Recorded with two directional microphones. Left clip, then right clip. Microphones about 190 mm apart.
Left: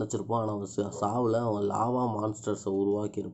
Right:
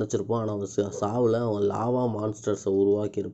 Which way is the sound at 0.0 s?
5° right (ahead or behind).